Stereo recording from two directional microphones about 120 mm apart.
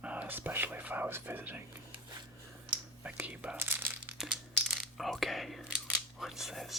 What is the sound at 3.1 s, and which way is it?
Speech, 10° right (ahead or behind).